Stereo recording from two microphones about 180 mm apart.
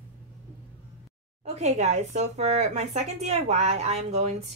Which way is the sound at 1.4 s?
40° right (ahead or behind).